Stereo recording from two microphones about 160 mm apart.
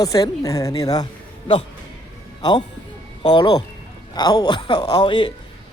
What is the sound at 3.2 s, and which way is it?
Speech, 30° left (ahead or behind).